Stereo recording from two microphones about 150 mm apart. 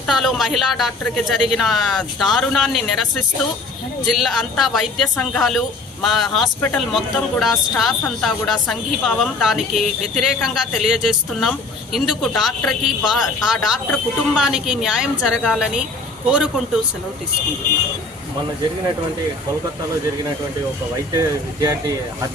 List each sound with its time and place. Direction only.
0.1 s speech: centre (ahead or behind)
4.0 s speech: centre (ahead or behind)
21.1 s speech: 25° right (ahead or behind)